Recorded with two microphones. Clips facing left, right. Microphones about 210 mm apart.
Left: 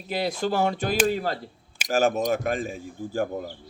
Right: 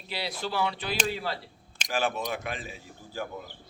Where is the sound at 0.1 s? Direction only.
45° left (ahead or behind).